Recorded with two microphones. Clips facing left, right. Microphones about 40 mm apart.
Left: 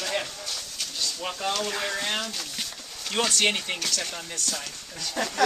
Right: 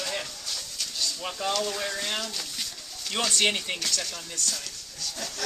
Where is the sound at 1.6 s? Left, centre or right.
Left.